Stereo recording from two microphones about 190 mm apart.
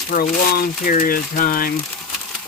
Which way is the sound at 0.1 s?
50° left (ahead or behind).